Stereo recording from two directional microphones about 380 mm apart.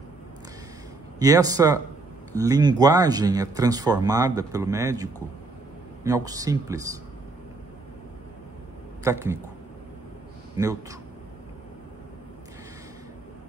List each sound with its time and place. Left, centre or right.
1.2 s speech: centre
9.0 s speech: centre
10.6 s speech: centre